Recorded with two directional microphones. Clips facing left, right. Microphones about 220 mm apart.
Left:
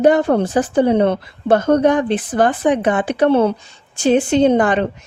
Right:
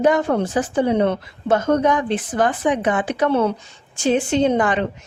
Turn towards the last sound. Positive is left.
turn(degrees=35)  # may be behind; listen again after turning